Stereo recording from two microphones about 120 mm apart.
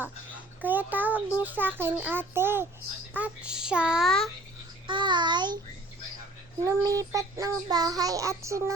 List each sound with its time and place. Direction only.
0.6 s a child's voice: 15° right (ahead or behind)
4.9 s a child's voice: 40° right (ahead or behind)
6.7 s child singing: 30° right (ahead or behind)